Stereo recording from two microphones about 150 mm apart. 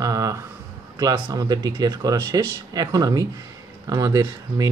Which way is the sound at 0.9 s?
25° right (ahead or behind).